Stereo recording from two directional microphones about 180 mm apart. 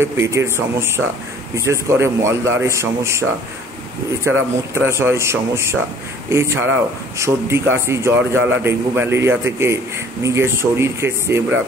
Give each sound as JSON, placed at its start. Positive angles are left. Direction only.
{"t": 0.0, "sound": "speech", "side_deg": -15}